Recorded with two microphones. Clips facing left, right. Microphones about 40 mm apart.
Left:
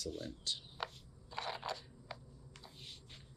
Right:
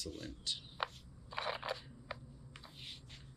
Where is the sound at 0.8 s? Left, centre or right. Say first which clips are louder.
Right 5 dB; centre.